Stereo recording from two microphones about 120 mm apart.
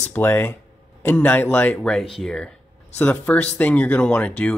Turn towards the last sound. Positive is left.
turn(degrees=10)  # may be behind; listen again after turning